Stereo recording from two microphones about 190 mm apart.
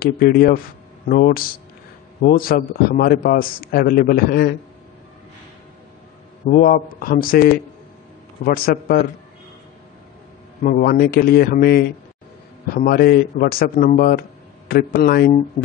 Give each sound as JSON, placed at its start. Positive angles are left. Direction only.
{"t": 0.0, "sound": "a man's voice", "side_deg": 55}
{"t": 6.4, "sound": "a man's voice", "side_deg": 45}
{"t": 10.6, "sound": "a man's voice", "side_deg": 45}
{"t": 15.6, "sound": "music", "side_deg": 40}